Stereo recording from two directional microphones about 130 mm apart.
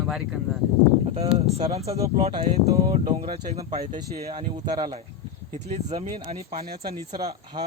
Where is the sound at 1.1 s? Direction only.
50° right (ahead or behind).